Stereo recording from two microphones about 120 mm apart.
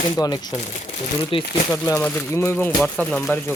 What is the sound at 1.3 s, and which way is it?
Speech, 50° left (ahead or behind).